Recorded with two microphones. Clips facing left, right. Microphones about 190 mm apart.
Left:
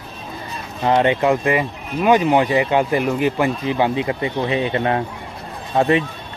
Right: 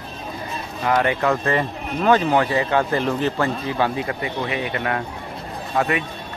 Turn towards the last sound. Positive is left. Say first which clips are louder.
# left 5 dB
turn(degrees=25)  # may be behind; listen again after turning